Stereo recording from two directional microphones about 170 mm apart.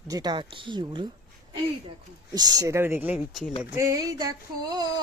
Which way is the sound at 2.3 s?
20° right (ahead or behind).